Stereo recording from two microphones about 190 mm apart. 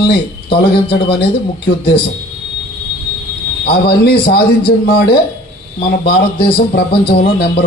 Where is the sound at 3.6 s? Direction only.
55° left (ahead or behind).